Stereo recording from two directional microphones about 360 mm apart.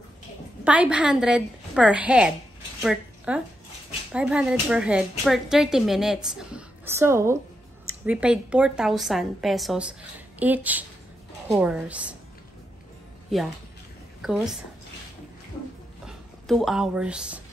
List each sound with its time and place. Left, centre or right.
0.7 s a woman's voice: centre
14.2 s a woman's voice: centre
16.1 s speech: centre